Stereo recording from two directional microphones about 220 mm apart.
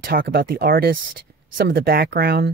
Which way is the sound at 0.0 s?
45° right (ahead or behind).